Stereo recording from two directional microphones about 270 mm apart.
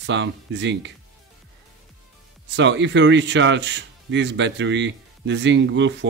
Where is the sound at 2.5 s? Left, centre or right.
Right.